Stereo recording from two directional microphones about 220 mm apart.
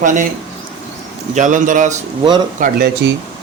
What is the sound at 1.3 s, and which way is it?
Speech, 35° right (ahead or behind).